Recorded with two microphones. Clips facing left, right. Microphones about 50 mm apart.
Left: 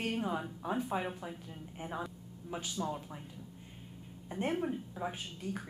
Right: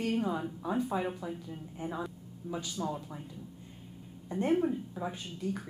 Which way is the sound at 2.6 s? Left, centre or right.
Centre.